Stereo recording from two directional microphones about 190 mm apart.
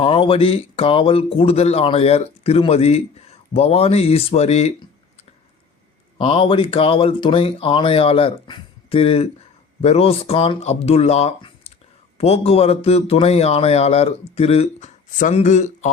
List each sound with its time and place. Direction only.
0.0 s speech: 30° left (ahead or behind)
6.1 s speech: 30° left (ahead or behind)